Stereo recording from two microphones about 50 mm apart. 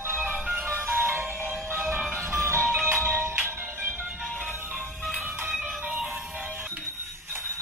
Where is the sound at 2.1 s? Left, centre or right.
Right.